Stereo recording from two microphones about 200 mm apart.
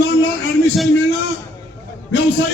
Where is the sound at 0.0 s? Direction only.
65° left (ahead or behind).